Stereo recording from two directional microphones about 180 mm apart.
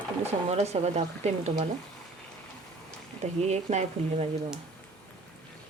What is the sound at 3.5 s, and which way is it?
Speech, 40° right (ahead or behind).